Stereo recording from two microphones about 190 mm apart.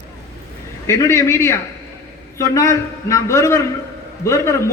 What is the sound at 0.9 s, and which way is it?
A man's voice, 15° left (ahead or behind).